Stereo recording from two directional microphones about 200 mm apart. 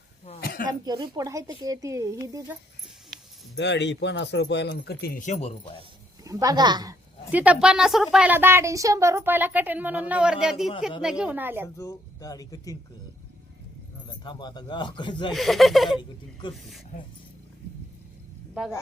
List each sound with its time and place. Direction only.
0.3 s a sound: 45° left (ahead or behind)
0.7 s a woman's voice: 20° right (ahead or behind)
3.5 s speech: 60° left (ahead or behind)
5.2 s speech: 35° left (ahead or behind)
6.2 s a woman's voice: 20° right (ahead or behind)
7.3 s a woman's voice: 5° right (ahead or behind)
11.8 s speech: 15° left (ahead or behind)
14.3 s speech: 20° left (ahead or behind)
15.3 s speech: centre (ahead or behind)